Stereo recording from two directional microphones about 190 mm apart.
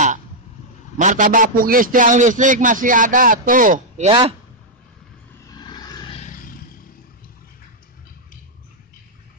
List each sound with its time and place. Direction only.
0.9 s a man's voice: 45° right (ahead or behind)
4.1 s speech: 30° right (ahead or behind)
5.6 s vehicle: 20° left (ahead or behind)
6.2 s roar: 45° left (ahead or behind)